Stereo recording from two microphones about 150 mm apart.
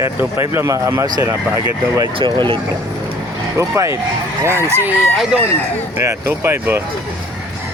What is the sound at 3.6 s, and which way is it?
Speech, 20° right (ahead or behind).